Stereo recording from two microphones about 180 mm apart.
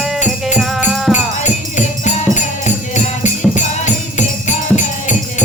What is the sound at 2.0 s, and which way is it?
Music, 40° left (ahead or behind).